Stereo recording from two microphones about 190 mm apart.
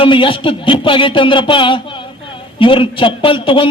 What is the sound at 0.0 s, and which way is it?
A man's voice, 25° left (ahead or behind).